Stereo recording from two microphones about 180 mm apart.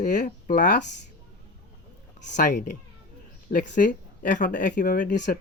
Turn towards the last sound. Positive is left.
turn(degrees=45)  # may be behind; listen again after turning